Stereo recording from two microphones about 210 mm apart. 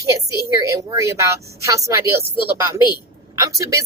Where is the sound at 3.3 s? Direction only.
15° right (ahead or behind).